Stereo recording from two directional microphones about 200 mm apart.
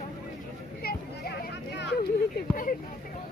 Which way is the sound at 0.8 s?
50° left (ahead or behind).